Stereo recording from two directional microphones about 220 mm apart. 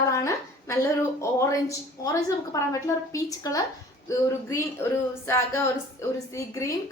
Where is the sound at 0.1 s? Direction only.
15° left (ahead or behind).